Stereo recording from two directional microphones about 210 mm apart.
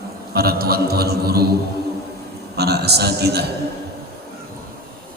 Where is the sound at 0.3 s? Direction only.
45° right (ahead or behind).